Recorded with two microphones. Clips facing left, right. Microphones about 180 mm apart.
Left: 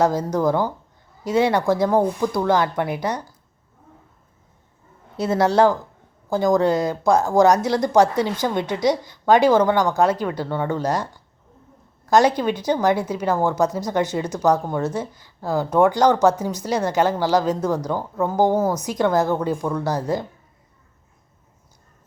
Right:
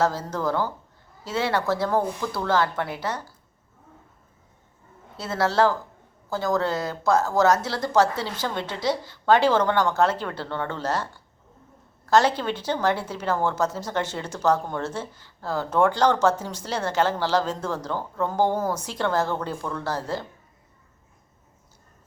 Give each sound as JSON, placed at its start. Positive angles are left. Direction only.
{"t": 0.0, "sound": "a woman's voice", "side_deg": 15}
{"t": 5.1, "sound": "a woman's voice", "side_deg": 20}